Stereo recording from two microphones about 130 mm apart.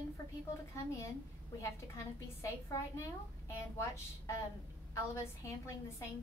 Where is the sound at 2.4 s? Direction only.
25° left (ahead or behind).